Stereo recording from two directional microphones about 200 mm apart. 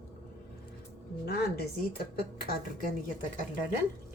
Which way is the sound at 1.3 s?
50° left (ahead or behind).